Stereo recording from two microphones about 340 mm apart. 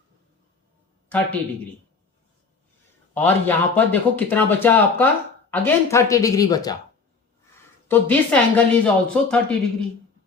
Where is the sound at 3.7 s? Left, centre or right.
Centre.